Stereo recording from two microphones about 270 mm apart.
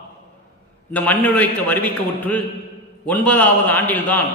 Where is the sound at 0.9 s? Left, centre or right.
Centre.